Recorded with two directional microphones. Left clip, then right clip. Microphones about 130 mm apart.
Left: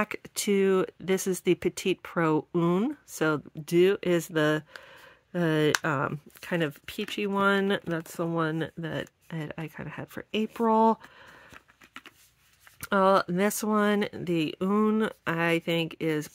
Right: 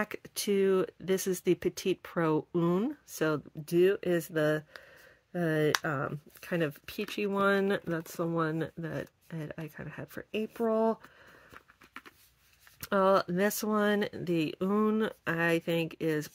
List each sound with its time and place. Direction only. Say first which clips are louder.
0.0 s speech: left 4 dB; 30° left (ahead or behind)
3.6 s speech: left 3 dB; 60° left (ahead or behind)
6.4 s speech: left 3 dB; 30° left (ahead or behind)
10.3 s speech: left 5 dB; 55° left (ahead or behind)
11.5 s a sound: left 2 dB; 90° left
12.8 s speech: left 3 dB; 25° left (ahead or behind)